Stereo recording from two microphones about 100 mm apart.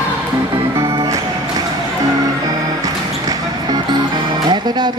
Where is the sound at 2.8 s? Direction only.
40° right (ahead or behind).